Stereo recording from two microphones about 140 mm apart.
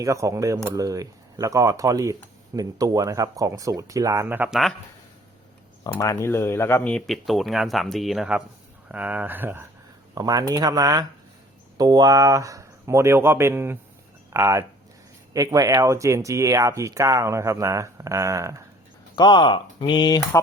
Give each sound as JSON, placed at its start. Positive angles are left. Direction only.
{"t": 0.0, "sound": "speech", "side_deg": -25}
{"t": 6.0, "sound": "speech", "side_deg": 20}
{"t": 10.2, "sound": "speech", "side_deg": -25}
{"t": 19.1, "sound": "speech", "side_deg": 35}